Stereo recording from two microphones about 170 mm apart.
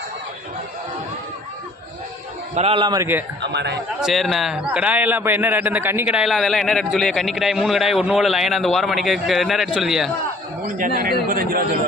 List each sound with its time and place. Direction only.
2.6 s a man's voice: 35° right (ahead or behind); by 3.2 s 15° right (ahead or behind)
3.4 s a man's voice: 85° right
4.0 s a man's voice: centre (ahead or behind)
10.8 s speech: 55° right (ahead or behind)